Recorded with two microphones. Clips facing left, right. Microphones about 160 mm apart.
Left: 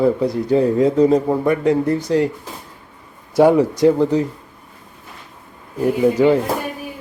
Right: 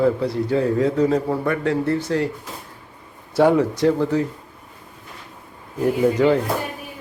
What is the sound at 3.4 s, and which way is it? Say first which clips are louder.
Speech: left 3 dB; 15° left (ahead or behind).